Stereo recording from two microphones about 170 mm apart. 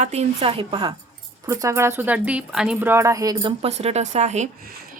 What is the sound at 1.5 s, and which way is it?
A woman's voice, 15° right (ahead or behind).